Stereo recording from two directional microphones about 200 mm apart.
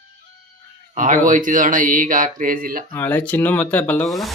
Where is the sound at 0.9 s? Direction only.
40° right (ahead or behind).